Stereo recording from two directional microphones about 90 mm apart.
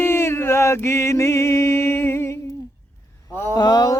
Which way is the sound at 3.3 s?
30° left (ahead or behind).